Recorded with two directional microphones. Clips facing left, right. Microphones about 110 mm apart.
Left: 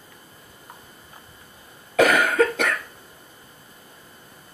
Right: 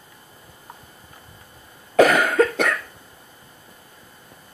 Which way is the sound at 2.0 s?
35° right (ahead or behind).